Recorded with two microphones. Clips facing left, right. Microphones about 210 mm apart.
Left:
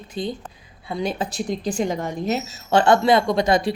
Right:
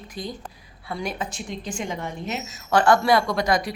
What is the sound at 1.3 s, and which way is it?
Speech, 35° left (ahead or behind).